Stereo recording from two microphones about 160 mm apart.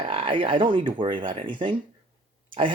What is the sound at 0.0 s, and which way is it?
Speech, 35° right (ahead or behind).